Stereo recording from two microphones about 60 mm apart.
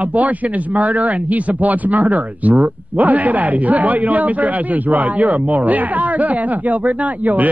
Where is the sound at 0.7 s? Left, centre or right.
Right.